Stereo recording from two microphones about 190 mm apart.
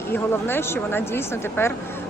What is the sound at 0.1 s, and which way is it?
Speech, 10° left (ahead or behind).